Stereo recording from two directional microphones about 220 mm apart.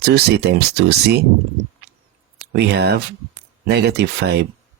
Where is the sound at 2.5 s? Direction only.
50° right (ahead or behind).